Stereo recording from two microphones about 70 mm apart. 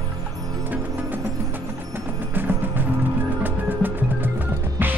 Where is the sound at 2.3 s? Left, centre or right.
Right.